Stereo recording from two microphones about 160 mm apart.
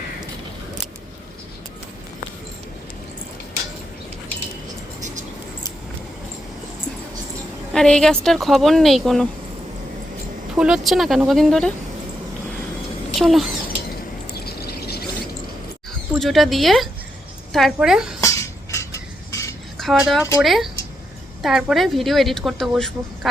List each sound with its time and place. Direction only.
7.7 s a woman's voice: 5° left (ahead or behind)
10.5 s a woman's voice: 5° right (ahead or behind)
13.1 s a woman's voice: centre (ahead or behind)
14.3 s a sound: 80° left
16.1 s a woman's voice: centre (ahead or behind)
18.2 s cutlery: 20° left (ahead or behind)
19.8 s a woman's voice: centre (ahead or behind)